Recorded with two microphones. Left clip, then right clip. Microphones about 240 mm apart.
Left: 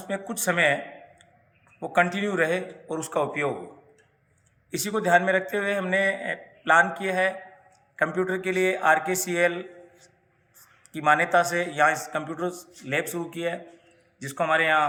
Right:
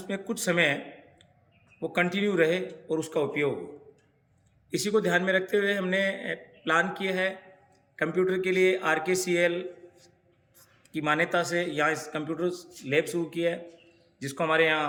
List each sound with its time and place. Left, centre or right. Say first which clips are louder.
0.1 s a man's voice: left 2 dB; centre
1.8 s a man's voice: left 4 dB; centre
4.7 s a man's voice: left 4 dB; centre